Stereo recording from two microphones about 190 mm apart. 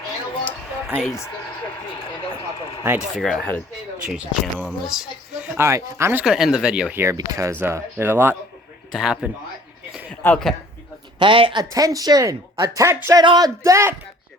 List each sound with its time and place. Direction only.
1.0 s speech: 15° left (ahead or behind)
3.2 s a man's voice: centre (ahead or behind)
11.2 s speech: 25° right (ahead or behind)